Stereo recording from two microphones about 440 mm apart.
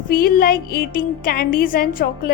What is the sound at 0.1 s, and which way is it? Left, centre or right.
A woman's voice, centre.